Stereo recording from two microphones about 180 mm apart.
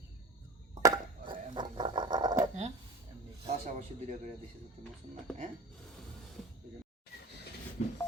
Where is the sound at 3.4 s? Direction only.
40° right (ahead or behind).